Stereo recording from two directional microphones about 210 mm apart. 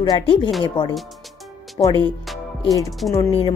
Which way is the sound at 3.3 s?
25° left (ahead or behind).